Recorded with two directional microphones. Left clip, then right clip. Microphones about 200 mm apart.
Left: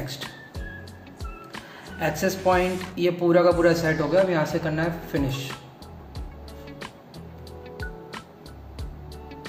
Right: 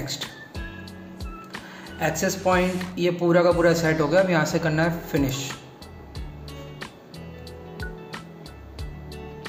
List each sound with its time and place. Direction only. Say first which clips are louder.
1.5 s speech: right 2 dB; 5° right (ahead or behind); by 5.5 s 20° right (ahead or behind)
7.7 s music: even; centre (ahead or behind)